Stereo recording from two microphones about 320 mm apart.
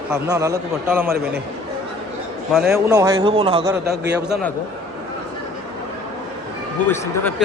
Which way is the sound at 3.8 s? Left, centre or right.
Right.